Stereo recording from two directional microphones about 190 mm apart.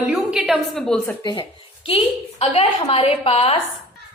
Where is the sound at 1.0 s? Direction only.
20° left (ahead or behind).